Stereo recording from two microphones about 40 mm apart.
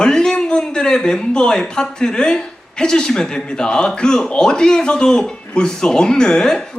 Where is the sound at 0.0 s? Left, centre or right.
Centre.